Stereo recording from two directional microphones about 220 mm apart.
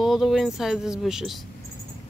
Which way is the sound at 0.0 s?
Centre (ahead or behind).